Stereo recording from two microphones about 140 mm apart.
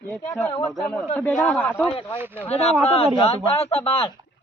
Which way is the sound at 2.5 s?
45° left (ahead or behind).